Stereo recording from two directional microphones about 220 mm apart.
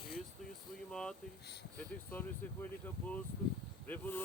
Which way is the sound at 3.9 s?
10° left (ahead or behind).